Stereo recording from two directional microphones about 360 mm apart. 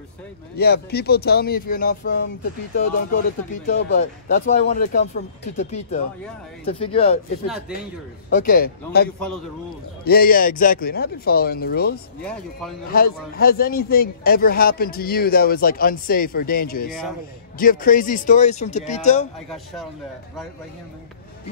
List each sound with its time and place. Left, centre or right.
0.6 s a man's voice: left
7.4 s speech: centre
8.3 s a man's voice: left
12.2 s speech: centre
12.8 s a man's voice: left
19.5 s speech: centre